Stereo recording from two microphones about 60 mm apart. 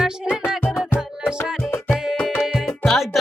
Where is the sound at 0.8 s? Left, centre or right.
Left.